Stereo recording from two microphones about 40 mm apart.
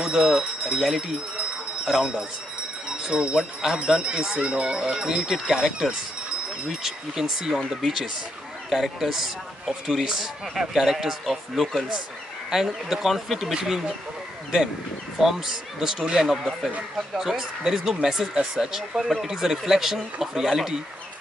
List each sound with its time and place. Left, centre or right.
0.0 s speech: right
15.1 s speech: centre